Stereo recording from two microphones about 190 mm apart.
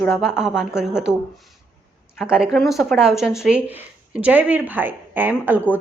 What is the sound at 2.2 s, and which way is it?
A woman's voice, 5° right (ahead or behind).